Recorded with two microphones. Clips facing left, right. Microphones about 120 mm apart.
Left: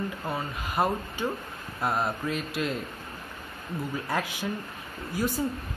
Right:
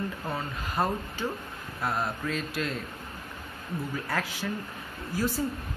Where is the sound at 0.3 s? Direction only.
15° left (ahead or behind).